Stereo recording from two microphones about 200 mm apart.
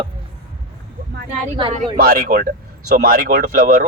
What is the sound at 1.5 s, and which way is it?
Speech, 25° right (ahead or behind).